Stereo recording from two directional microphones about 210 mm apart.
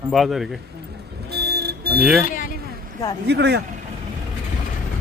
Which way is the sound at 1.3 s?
50° right (ahead or behind).